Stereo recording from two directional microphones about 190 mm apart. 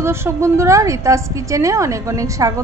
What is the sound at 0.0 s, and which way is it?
A woman's voice, 15° right (ahead or behind).